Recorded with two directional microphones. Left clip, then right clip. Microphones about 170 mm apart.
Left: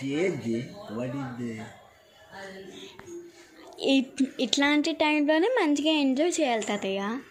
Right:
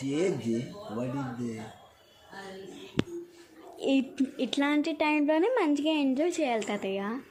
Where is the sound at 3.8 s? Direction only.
Centre (ahead or behind).